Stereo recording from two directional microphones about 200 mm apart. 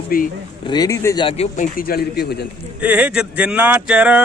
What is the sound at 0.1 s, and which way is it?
Speech, 45° left (ahead or behind).